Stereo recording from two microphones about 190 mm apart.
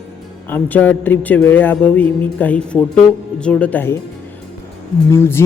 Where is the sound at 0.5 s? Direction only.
10° left (ahead or behind).